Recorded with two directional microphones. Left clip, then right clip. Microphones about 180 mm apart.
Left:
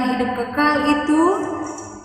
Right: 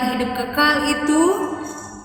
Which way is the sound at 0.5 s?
10° right (ahead or behind).